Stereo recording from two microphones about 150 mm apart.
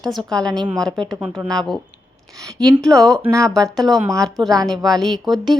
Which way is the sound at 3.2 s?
20° right (ahead or behind).